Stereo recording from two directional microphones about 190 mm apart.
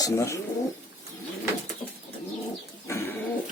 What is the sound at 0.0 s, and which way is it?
Speech, 15° left (ahead or behind).